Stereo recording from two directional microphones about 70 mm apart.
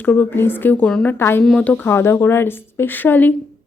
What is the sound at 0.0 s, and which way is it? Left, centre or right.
A woman's voice, left.